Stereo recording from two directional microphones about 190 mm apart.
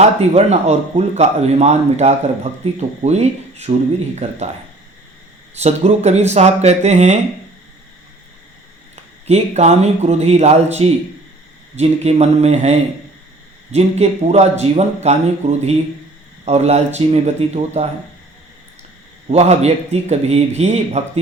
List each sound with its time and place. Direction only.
0.2 s speech: 35° right (ahead or behind)
5.5 s speech: 35° right (ahead or behind)
9.2 s speech: 35° right (ahead or behind)
19.3 s speech: 35° right (ahead or behind)